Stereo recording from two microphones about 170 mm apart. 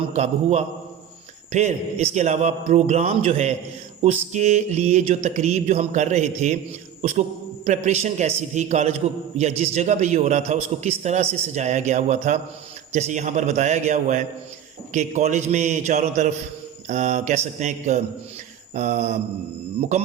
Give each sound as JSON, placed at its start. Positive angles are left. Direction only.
{"t": 0.0, "sound": "mantra", "side_deg": -40}
{"t": 7.0, "sound": "a man's voice", "side_deg": -40}
{"t": 18.7, "sound": "mantra", "side_deg": -40}